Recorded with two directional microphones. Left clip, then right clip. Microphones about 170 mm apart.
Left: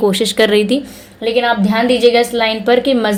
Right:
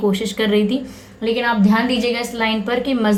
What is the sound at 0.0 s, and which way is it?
A woman's voice, 40° left (ahead or behind).